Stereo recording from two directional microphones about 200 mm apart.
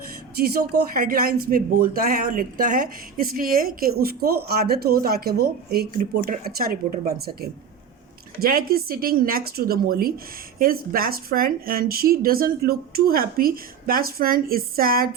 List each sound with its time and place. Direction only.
0.3 s speech: 50° right (ahead or behind)